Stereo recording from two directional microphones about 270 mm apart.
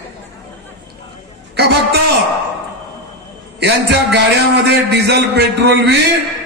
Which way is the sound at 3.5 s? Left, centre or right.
Right.